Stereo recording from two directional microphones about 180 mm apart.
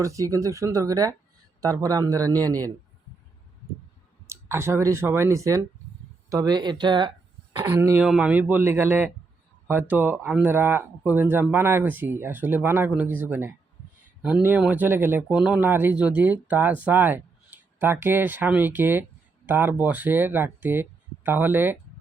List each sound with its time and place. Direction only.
0.0 s speech: 20° right (ahead or behind)
4.3 s speech: 15° right (ahead or behind)
7.7 s speech: 15° right (ahead or behind)